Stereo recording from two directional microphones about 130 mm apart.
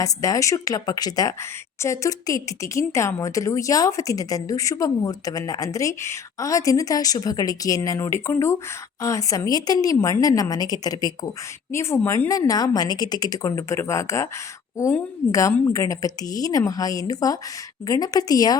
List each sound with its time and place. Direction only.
0.0 s speech: 25° left (ahead or behind)
15.3 s speech: 25° left (ahead or behind)